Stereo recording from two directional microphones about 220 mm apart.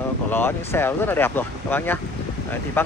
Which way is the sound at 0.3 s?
10° left (ahead or behind).